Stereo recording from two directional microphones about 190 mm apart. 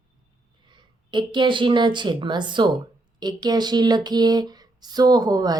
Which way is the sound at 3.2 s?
20° right (ahead or behind).